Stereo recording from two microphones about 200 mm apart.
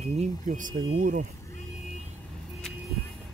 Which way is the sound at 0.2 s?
40° right (ahead or behind).